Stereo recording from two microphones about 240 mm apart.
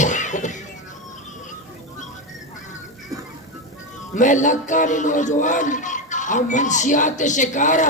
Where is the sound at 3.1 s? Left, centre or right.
Centre.